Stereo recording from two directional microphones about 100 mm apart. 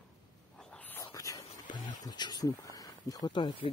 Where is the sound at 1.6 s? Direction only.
45° left (ahead or behind).